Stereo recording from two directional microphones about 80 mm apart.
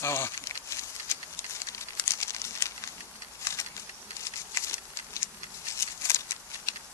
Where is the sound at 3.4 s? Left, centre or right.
Left.